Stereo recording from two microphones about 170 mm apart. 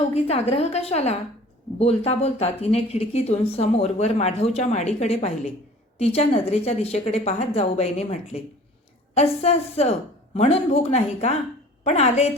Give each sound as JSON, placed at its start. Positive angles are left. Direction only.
{"t": 0.1, "sound": "a woman's voice", "side_deg": 40}